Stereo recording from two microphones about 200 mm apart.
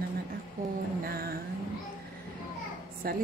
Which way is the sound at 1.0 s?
50° right (ahead or behind).